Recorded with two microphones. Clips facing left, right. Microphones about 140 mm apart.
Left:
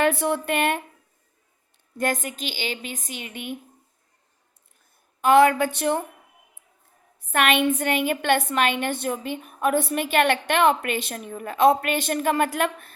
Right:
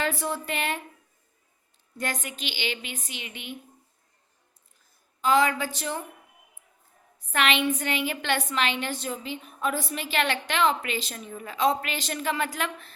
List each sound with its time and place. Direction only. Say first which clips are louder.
0.0 s a woman's voice: left 7 dB; 60° left (ahead or behind)
2.0 s a woman's voice: left 7 dB; 45° left (ahead or behind)
5.2 s a woman's voice: left 6 dB; 60° left (ahead or behind)
7.3 s a woman's voice: left 4 dB; 50° left (ahead or behind)